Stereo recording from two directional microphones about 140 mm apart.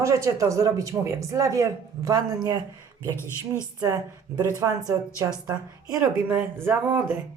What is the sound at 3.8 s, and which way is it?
Speech, 25° right (ahead or behind).